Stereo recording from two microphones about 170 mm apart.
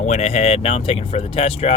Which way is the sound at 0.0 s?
40° left (ahead or behind).